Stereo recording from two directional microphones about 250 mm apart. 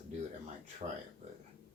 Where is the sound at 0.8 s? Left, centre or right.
Right.